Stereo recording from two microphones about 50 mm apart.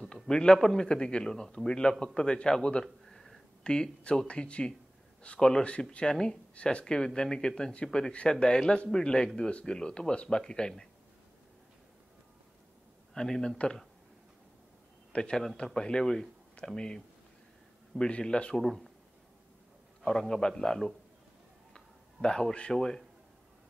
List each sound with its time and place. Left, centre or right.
0.1 s a man's voice: centre
2.8 s a sound: centre
3.6 s a man's voice: centre
9.5 s a man's voice: left
13.1 s speech: centre
15.1 s a man's voice: centre
18.6 s speech: centre
20.1 s a man's voice: centre